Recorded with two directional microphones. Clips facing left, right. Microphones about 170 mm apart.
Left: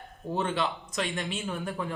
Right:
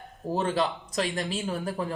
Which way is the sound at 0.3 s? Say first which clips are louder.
Right 3 dB; 40° right (ahead or behind).